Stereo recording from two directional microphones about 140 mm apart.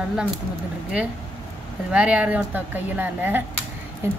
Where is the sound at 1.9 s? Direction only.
10° right (ahead or behind).